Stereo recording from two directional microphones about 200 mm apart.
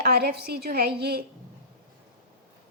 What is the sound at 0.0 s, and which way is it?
A woman's voice, 55° right (ahead or behind).